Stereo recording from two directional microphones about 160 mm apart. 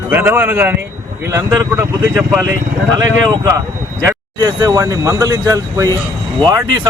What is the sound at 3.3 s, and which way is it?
Speech, 25° right (ahead or behind).